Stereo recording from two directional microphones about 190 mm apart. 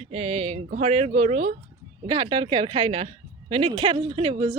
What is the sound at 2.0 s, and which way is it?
Speech, 25° right (ahead or behind).